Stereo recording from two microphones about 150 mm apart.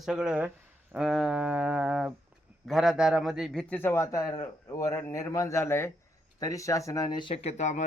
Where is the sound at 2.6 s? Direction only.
Centre (ahead or behind).